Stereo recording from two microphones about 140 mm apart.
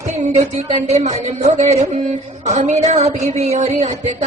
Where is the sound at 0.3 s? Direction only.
55° right (ahead or behind).